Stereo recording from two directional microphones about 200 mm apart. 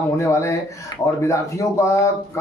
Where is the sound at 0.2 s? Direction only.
15° left (ahead or behind).